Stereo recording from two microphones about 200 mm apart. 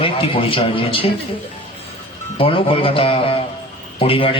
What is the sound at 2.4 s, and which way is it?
A man's voice, 25° left (ahead or behind).